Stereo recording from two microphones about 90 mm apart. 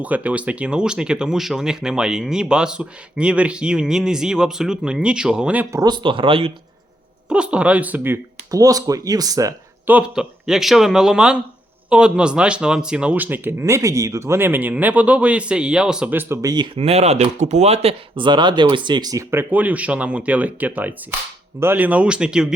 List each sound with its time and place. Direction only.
0.0 s speech: 15° right (ahead or behind)
5.9 s speech: 65° right (ahead or behind); by 6.5 s 85° right
7.3 s speech: 10° right (ahead or behind)
8.4 s speech: 40° right (ahead or behind)
10.2 s speech: 5° right (ahead or behind)
16.4 s speech: 45° right (ahead or behind)
17.8 s speech: 60° right (ahead or behind)
19.1 s speech: 25° right (ahead or behind); by 22.5 s 10° right (ahead or behind)